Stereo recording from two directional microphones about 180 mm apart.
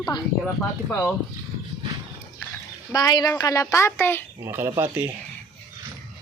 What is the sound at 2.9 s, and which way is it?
A woman's voice, 20° left (ahead or behind).